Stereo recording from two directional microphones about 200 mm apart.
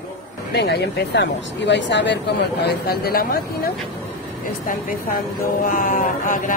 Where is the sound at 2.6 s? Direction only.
50° left (ahead or behind).